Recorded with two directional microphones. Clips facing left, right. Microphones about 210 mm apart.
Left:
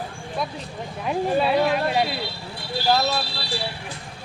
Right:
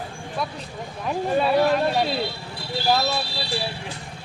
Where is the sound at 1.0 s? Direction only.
5° left (ahead or behind).